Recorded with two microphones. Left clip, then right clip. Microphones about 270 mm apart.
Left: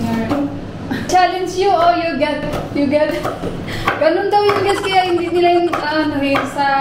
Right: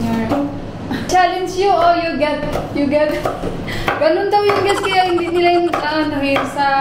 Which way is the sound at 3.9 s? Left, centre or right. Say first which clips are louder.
Even; centre.